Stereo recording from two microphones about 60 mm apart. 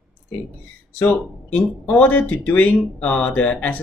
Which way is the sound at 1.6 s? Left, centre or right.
Centre.